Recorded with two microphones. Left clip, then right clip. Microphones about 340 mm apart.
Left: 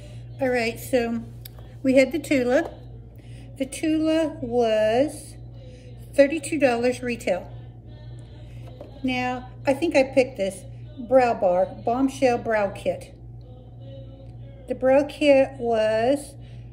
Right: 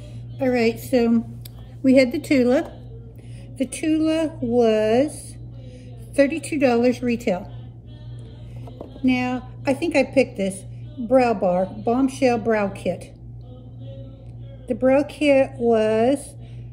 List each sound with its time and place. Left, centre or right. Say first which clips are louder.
0.4 s a woman's voice: right 3 dB; centre
3.5 s a woman's voice: right 2 dB; right
9.0 s a woman's voice: right 3 dB; right
14.7 s a woman's voice: right 1 dB; right